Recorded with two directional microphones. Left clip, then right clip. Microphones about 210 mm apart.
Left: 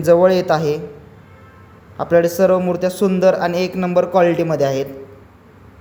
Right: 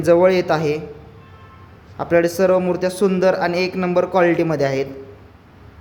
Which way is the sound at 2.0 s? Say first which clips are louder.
Left 2 dB; 5° right (ahead or behind).